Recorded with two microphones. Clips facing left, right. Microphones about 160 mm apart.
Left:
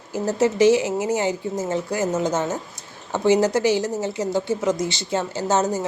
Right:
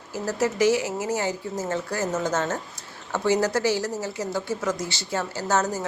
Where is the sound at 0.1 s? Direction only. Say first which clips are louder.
Left 5 dB; 20° left (ahead or behind).